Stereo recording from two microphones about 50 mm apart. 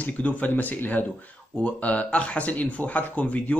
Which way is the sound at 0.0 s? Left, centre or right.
Left.